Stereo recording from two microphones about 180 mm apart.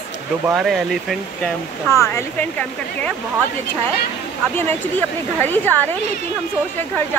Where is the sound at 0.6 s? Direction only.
Centre (ahead or behind).